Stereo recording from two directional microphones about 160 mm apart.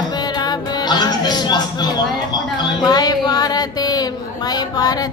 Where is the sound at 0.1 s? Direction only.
25° left (ahead or behind).